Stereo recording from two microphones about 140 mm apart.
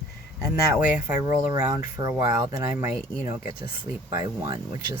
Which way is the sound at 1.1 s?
20° right (ahead or behind).